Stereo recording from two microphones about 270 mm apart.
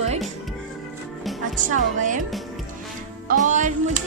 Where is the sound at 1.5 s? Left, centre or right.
Right.